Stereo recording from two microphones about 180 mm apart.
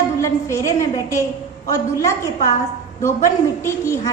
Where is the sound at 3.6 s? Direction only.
15° left (ahead or behind).